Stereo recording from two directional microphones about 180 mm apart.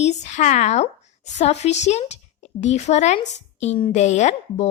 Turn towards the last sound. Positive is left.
turn(degrees=40)  # may be behind; listen again after turning